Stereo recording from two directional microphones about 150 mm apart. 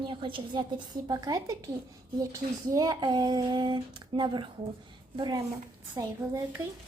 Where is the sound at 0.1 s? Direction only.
35° right (ahead or behind).